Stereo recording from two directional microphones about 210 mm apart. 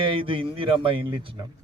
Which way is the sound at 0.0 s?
25° right (ahead or behind).